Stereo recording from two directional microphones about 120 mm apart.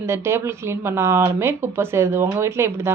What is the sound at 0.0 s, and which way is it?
A woman's voice, 20° right (ahead or behind).